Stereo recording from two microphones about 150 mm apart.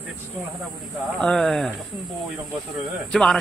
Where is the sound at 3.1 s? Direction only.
5° left (ahead or behind).